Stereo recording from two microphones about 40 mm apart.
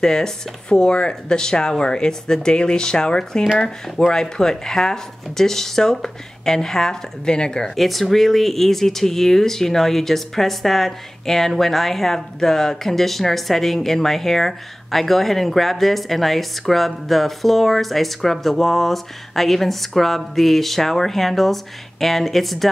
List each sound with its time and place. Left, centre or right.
0.0 s speech: centre
7.7 s speech: centre